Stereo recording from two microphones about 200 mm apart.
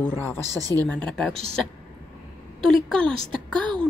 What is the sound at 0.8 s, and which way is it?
Speech, 5° left (ahead or behind).